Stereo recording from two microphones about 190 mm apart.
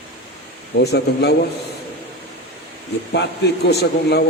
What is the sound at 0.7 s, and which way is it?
Speech, 60° left (ahead or behind).